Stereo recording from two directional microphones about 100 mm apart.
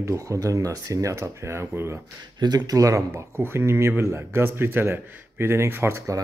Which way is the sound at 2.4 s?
45° right (ahead or behind).